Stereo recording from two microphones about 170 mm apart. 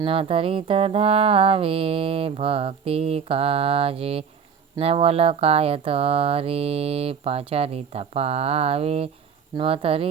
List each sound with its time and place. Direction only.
0.0 s speech: 30° right (ahead or behind)